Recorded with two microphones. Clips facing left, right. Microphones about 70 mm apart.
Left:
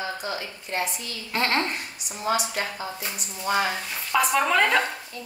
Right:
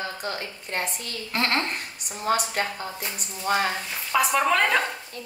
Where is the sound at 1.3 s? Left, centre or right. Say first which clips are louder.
Left 1 dB; centre.